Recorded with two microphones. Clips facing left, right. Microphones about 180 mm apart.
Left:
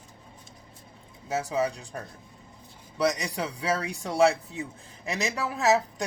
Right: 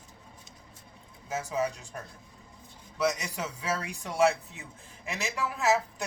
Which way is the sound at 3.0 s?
35° left (ahead or behind).